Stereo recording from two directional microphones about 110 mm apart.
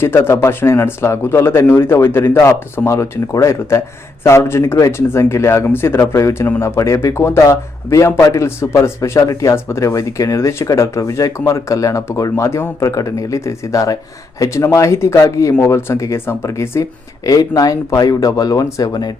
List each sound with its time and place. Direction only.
0.0 s speech: 20° left (ahead or behind)